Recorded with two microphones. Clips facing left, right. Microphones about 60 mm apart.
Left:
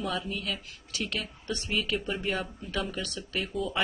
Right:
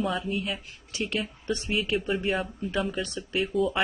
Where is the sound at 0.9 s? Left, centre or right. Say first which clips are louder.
Right 4 dB; right.